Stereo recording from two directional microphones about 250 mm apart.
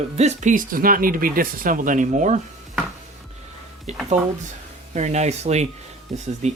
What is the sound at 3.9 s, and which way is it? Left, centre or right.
Speech, right.